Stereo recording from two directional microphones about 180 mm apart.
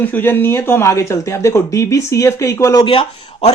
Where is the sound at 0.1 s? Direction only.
10° left (ahead or behind).